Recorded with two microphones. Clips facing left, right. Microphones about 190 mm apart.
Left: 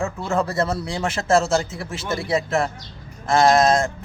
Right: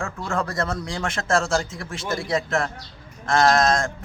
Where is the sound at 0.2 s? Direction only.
5° left (ahead or behind).